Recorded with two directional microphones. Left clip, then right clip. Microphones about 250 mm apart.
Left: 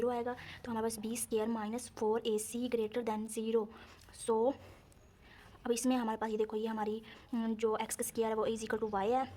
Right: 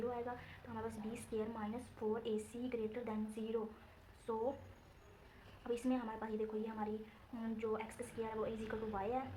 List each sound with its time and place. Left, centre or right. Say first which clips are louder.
0.0 s a woman's voice: left 7 dB; left
5.6 s a woman's voice: left 7 dB; left